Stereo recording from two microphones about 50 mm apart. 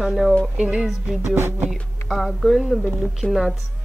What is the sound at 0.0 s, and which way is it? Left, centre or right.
A woman's voice, centre.